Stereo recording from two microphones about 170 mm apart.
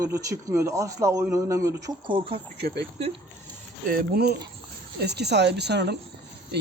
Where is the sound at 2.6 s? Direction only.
80° right.